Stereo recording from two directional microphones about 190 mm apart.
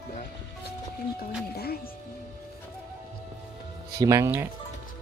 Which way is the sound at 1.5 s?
55° left (ahead or behind).